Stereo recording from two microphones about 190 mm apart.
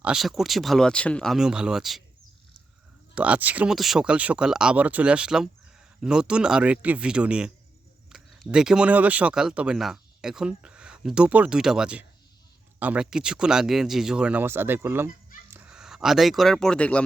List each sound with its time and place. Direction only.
0.0 s speech: 5° right (ahead or behind)
3.2 s speech: 5° right (ahead or behind)